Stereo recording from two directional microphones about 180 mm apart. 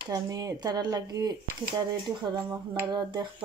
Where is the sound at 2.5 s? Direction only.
20° right (ahead or behind).